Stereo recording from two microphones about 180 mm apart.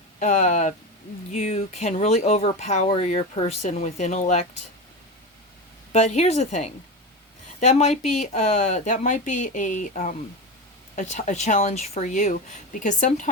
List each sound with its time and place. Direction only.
0.2 s speech: 45° left (ahead or behind)
5.9 s speech: 40° left (ahead or behind)